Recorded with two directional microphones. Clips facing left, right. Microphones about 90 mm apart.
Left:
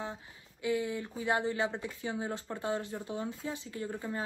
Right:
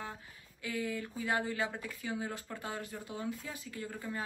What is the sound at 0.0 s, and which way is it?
Speech, 20° left (ahead or behind).